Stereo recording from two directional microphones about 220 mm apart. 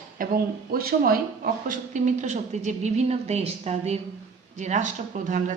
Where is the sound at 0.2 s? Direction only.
40° right (ahead or behind).